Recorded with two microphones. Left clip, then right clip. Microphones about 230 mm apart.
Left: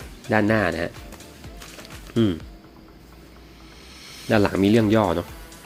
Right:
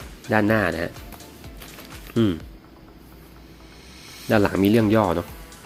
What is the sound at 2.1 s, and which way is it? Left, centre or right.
Speech, centre.